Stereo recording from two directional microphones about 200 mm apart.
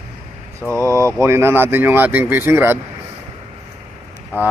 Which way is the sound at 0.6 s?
10° left (ahead or behind).